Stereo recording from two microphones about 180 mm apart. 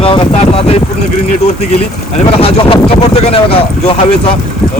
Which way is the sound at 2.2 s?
30° left (ahead or behind).